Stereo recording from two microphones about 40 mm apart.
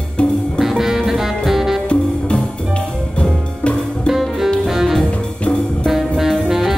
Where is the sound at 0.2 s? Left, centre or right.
Left.